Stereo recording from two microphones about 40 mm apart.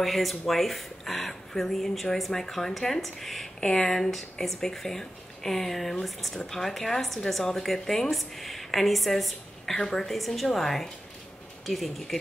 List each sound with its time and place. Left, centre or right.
0.0 s speech: centre
3.6 s speech: centre
9.7 s speech: centre
10.1 s speech: centre